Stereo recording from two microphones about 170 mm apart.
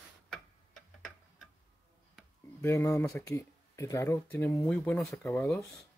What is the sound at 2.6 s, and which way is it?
Speech, 20° left (ahead or behind).